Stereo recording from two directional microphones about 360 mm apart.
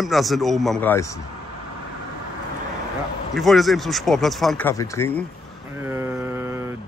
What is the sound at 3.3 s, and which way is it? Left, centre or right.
Speech, centre.